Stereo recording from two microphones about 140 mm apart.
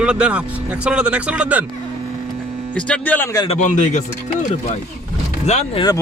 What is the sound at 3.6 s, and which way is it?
Speech, 60° left (ahead or behind).